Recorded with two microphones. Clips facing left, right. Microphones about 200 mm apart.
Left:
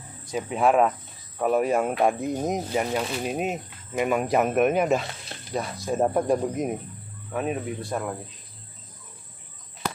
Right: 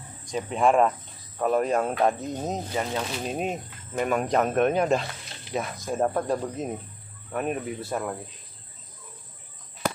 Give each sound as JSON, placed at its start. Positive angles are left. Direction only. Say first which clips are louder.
{"t": 0.2, "sound": "speech", "louder": "even", "side_deg": 5}
{"t": 5.3, "sound": "a sound", "louder": "left 4 dB", "side_deg": 55}
{"t": 6.0, "sound": "speech", "louder": "left 4 dB", "side_deg": 15}
{"t": 7.3, "sound": "speech", "louder": "left 1 dB", "side_deg": 0}